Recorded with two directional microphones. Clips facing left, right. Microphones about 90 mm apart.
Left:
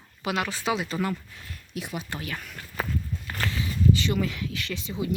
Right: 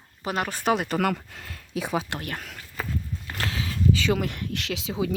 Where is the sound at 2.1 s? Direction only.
55° right (ahead or behind).